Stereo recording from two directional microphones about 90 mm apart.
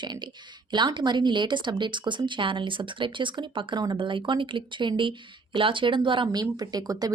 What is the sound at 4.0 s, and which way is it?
A woman's voice, 65° right (ahead or behind).